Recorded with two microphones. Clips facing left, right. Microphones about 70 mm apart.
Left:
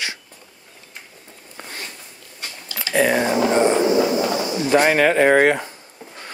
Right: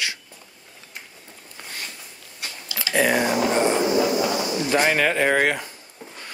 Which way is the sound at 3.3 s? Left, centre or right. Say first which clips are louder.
Left 3 dB; left.